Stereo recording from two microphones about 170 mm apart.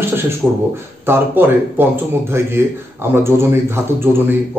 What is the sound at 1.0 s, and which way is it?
A man's voice, 15° right (ahead or behind).